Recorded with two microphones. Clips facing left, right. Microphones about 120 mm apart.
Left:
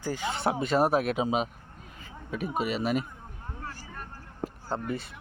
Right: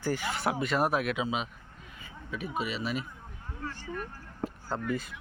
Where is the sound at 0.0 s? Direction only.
20° left (ahead or behind); by 3.1 s 50° left (ahead or behind).